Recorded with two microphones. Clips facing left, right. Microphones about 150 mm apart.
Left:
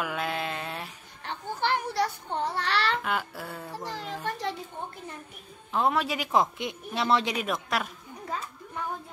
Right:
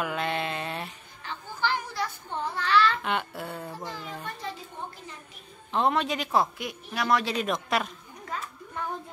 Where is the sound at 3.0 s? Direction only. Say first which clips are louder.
Right 1 dB; centre (ahead or behind).